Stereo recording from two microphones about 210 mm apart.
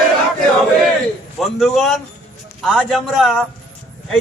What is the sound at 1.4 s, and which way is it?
A man's voice, centre (ahead or behind).